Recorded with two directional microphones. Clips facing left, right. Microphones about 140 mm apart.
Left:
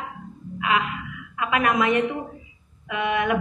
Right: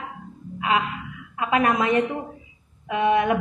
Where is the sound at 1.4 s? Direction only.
30° right (ahead or behind).